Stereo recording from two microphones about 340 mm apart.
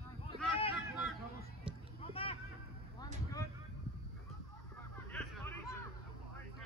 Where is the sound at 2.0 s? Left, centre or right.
Centre.